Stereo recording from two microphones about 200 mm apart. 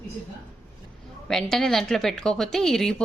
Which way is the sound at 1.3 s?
Centre (ahead or behind).